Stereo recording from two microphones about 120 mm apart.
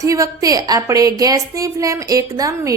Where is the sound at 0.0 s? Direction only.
30° right (ahead or behind).